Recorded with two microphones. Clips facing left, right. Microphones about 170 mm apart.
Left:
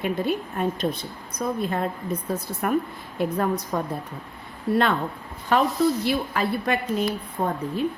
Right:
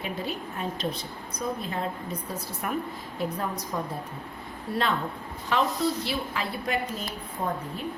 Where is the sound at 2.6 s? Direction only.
50° left (ahead or behind).